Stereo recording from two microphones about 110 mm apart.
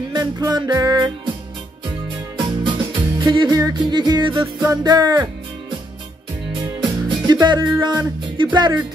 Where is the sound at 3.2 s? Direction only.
45° right (ahead or behind).